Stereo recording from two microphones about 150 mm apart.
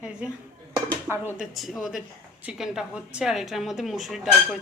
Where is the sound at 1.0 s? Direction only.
15° right (ahead or behind).